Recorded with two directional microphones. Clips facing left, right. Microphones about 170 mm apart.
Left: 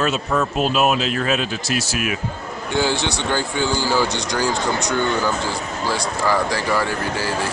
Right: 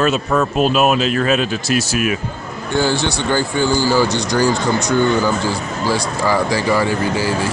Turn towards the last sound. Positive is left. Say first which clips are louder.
# right 5 dB
turn(degrees=-10)  # may be behind; listen again after turning